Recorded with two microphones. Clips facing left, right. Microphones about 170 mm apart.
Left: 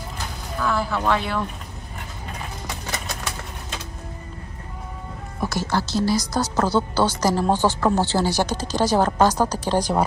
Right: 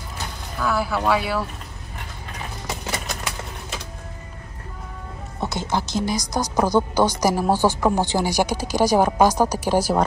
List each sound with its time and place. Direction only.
0.6 s speech: 5° right (ahead or behind)
5.4 s speech: 20° right (ahead or behind)